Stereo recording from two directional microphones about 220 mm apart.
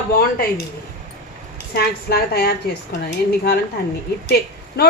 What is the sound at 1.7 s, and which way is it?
Speech, 45° left (ahead or behind).